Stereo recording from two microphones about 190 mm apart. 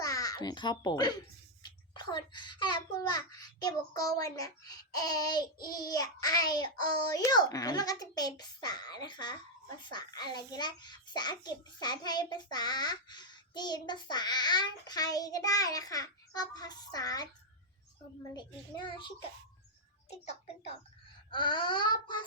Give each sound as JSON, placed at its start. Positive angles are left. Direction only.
{"t": 0.0, "sound": "a child's voice", "side_deg": 15}
{"t": 18.3, "sound": "a child's voice", "side_deg": 25}